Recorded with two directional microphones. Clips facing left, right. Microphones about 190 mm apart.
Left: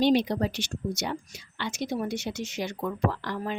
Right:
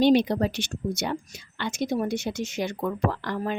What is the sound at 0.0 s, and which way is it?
Speech, 55° right (ahead or behind).